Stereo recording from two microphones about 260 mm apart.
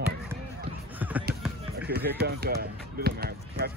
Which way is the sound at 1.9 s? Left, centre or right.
Right.